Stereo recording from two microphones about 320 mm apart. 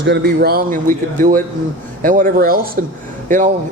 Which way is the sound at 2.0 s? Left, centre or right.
Right.